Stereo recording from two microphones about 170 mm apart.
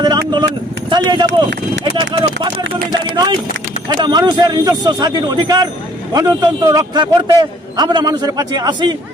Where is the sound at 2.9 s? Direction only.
25° right (ahead or behind).